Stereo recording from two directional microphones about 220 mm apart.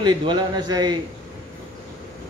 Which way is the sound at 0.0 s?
20° right (ahead or behind).